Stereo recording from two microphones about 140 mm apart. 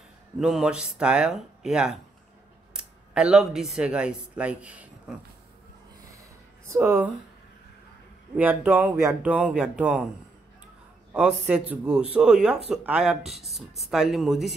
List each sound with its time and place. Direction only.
0.4 s speech: 5° right (ahead or behind)
6.6 s speech: 20° right (ahead or behind)
8.4 s speech: 10° right (ahead or behind)
9.3 s speech: 5° right (ahead or behind)
11.1 s speech: 5° right (ahead or behind)